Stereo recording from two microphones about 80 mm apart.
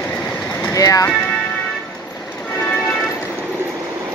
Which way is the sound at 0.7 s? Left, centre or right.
Left.